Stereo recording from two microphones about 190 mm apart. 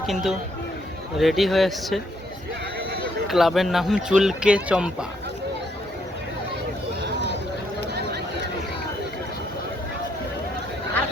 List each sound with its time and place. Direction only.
0.0 s speech: centre (ahead or behind)
3.2 s speech: centre (ahead or behind)
7.0 s a sound: 65° right (ahead or behind)